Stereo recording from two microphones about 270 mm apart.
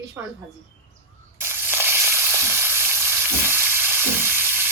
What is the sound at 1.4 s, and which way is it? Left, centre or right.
Frying, centre.